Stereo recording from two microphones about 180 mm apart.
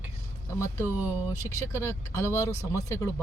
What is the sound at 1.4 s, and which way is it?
Speech, 15° left (ahead or behind).